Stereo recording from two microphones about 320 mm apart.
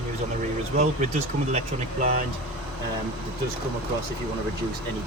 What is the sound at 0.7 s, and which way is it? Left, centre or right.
Speech, right.